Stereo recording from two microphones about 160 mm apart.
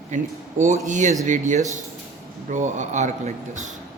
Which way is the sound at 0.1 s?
50° right (ahead or behind).